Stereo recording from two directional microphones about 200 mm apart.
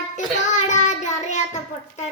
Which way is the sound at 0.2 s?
40° left (ahead or behind).